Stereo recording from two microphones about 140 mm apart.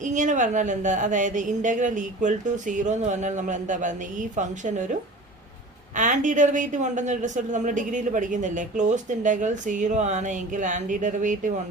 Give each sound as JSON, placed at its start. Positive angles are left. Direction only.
{"t": 0.0, "sound": "a man's voice", "side_deg": -65}
{"t": 6.0, "sound": "a man's voice", "side_deg": -65}